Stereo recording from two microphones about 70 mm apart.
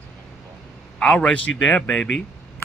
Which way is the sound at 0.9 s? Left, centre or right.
Centre.